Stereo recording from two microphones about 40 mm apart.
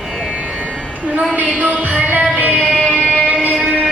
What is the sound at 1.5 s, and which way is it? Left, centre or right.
Music, right.